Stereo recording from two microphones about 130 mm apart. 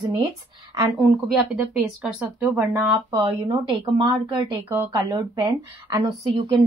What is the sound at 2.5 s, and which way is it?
Speech, 20° right (ahead or behind).